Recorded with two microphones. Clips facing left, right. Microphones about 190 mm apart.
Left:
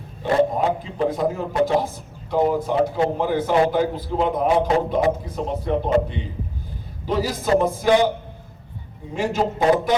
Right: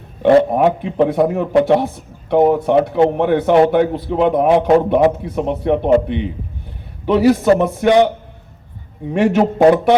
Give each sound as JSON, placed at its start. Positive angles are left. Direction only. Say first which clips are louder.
{"t": 0.2, "sound": "a man's voice", "louder": "right 8 dB", "side_deg": -65}
{"t": 9.1, "sound": "a man's voice", "louder": "right 8 dB", "side_deg": -65}